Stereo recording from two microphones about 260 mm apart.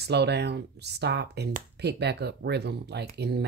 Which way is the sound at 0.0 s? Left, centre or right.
Right.